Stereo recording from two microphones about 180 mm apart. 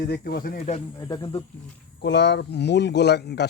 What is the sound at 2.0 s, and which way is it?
Speech, 75° left (ahead or behind).